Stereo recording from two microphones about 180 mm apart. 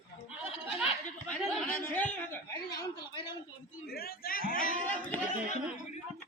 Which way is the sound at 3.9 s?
60° left (ahead or behind).